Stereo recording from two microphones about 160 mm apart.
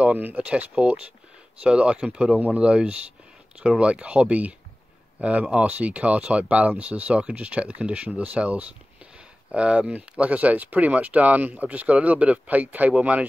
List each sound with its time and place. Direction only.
0.0 s speech: 10° right (ahead or behind)